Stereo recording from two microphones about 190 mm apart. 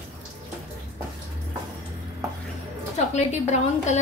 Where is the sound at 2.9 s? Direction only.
35° left (ahead or behind).